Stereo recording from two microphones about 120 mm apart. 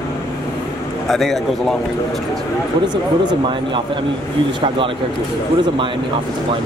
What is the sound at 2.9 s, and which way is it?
Speech, 40° right (ahead or behind).